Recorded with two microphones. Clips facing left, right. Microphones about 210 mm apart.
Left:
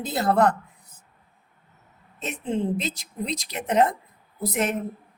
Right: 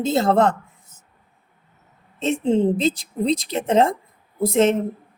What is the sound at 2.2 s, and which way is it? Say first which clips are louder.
Speech: right 8 dB; 25° right (ahead or behind).